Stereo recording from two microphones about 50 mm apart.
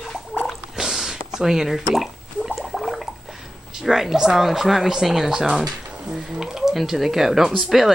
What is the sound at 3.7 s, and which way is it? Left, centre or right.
Speech, centre.